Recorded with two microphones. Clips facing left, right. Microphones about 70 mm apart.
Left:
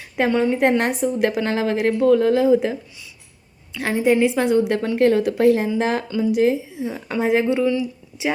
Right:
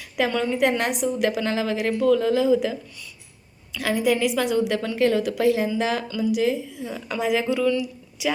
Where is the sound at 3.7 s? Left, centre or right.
Left.